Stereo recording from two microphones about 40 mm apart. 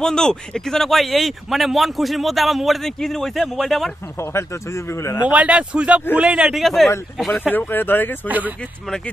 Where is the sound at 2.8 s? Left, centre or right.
Centre.